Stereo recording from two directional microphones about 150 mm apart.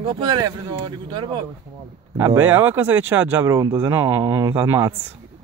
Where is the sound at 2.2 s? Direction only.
15° right (ahead or behind).